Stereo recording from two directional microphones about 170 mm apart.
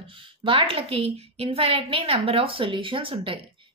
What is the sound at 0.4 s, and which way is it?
A woman's voice, 30° right (ahead or behind).